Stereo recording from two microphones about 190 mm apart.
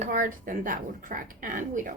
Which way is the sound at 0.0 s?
45° right (ahead or behind).